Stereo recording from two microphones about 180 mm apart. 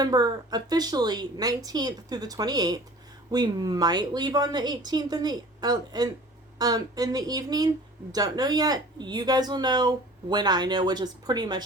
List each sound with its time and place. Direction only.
0.0 s speech: 20° right (ahead or behind)